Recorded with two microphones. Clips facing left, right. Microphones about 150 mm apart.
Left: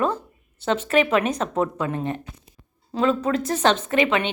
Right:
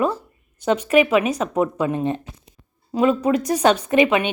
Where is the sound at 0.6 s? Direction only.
15° right (ahead or behind).